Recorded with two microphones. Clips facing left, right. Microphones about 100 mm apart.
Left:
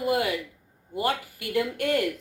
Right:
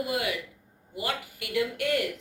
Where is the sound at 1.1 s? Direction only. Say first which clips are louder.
Left 5 dB; 50° left (ahead or behind).